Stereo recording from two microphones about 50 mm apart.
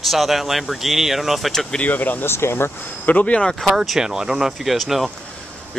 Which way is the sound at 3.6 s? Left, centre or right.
Centre.